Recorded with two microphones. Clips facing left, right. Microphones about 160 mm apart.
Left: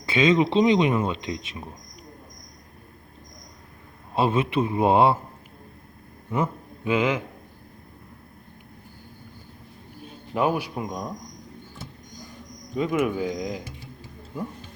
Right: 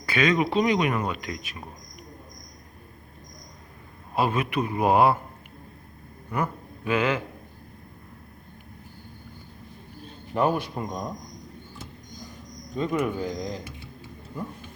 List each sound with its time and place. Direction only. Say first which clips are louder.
0.0 s a man's voice: left 3 dB; 25° left (ahead or behind)
4.1 s a man's voice: left 3 dB; 25° left (ahead or behind)
6.3 s speech: left 2 dB; 20° left (ahead or behind)
10.3 s speech: even; 5° left (ahead or behind)
12.7 s speech: left 2 dB; 10° left (ahead or behind)